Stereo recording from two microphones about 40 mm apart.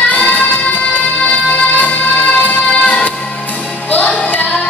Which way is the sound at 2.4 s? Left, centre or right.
Left.